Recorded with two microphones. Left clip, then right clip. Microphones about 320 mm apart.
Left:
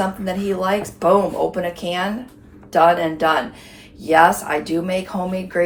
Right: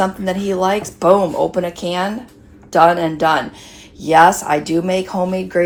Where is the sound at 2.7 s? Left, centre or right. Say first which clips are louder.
Right 2 dB; right.